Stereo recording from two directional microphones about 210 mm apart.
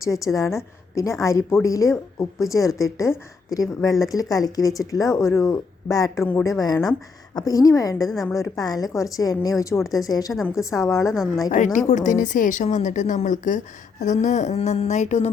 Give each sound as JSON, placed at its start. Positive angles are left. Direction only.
{"t": 0.0, "sound": "a woman's voice", "side_deg": 15}
{"t": 8.0, "sound": "a woman's voice", "side_deg": 0}
{"t": 8.3, "sound": "a woman's voice", "side_deg": 15}
{"t": 10.3, "sound": "a woman's voice", "side_deg": 0}
{"t": 10.6, "sound": "a woman's voice", "side_deg": 15}
{"t": 11.5, "sound": "a woman's voice", "side_deg": 35}